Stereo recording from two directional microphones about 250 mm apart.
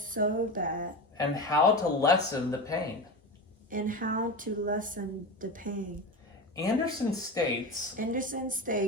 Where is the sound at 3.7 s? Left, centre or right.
Right.